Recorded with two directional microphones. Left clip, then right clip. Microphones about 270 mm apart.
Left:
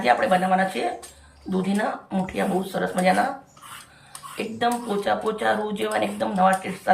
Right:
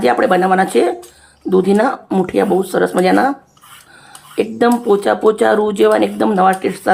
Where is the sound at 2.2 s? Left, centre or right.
Centre.